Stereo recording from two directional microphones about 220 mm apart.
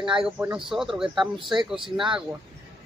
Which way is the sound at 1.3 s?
20° right (ahead or behind).